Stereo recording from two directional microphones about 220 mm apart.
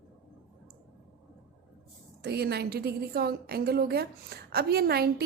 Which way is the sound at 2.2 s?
45° right (ahead or behind).